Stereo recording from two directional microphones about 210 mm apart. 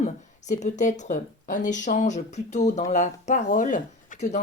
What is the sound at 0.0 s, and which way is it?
Speech, 35° left (ahead or behind).